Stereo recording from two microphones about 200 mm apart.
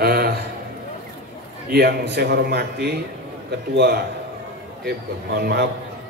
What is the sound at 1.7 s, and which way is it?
A man's voice, 55° right (ahead or behind).